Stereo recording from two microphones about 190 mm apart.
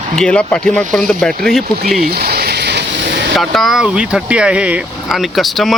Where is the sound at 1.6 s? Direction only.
50° right (ahead or behind).